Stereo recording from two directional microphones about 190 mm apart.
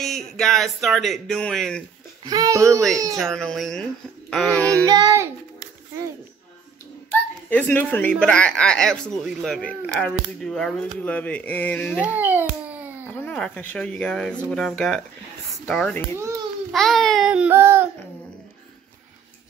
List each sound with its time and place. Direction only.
0.0 s speech: centre (ahead or behind)
2.2 s a child's voice: 20° right (ahead or behind)
3.2 s speech: centre (ahead or behind)
4.8 s child singing: 20° right (ahead or behind)
7.1 s speech: 10° left (ahead or behind)
12.0 s a child's voice: 10° right (ahead or behind)
13.0 s speech: 10° left (ahead or behind); by 17.8 s 10° right (ahead or behind)